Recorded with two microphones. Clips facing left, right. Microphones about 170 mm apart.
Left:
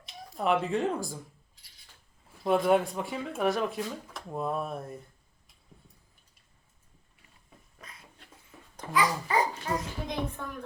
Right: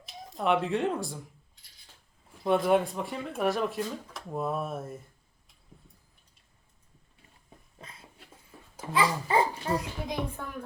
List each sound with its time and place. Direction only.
0.3 s speech: centre (ahead or behind)
2.4 s speech: centre (ahead or behind)
7.8 s a sound: 30° right (ahead or behind)
8.9 s a child's voice: 30° right (ahead or behind)
9.7 s a child's voice: 10° right (ahead or behind)